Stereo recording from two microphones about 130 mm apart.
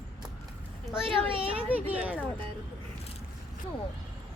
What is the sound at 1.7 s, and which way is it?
Speech, 10° right (ahead or behind).